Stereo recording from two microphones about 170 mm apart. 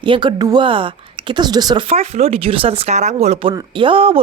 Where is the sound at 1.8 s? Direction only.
40° right (ahead or behind).